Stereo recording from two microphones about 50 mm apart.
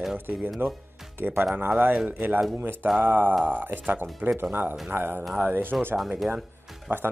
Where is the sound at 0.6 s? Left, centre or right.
Right.